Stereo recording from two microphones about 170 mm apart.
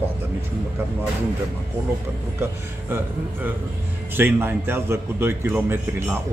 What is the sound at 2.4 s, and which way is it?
A man's voice, 15° right (ahead or behind).